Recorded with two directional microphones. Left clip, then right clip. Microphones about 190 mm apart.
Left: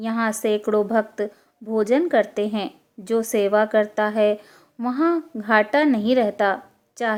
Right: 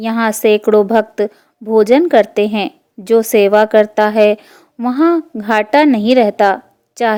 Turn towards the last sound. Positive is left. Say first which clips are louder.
# right 9 dB
turn(degrees=-40)  # may be behind; listen again after turning